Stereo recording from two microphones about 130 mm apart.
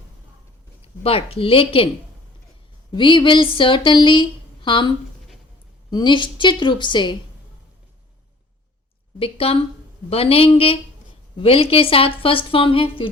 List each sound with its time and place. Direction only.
0.8 s a woman's voice: 50° left (ahead or behind)
2.9 s a woman's voice: 40° left (ahead or behind)
9.1 s a woman's voice: 45° left (ahead or behind)